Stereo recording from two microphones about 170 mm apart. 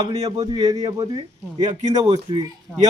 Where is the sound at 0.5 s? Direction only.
20° right (ahead or behind).